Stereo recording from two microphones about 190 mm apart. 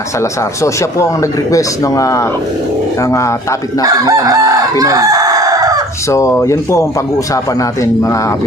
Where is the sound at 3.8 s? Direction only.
20° right (ahead or behind).